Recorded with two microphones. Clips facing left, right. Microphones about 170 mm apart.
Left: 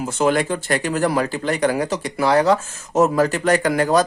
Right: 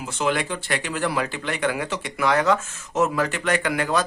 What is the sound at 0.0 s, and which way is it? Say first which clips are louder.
Speech: left 6 dB; 45° left (ahead or behind).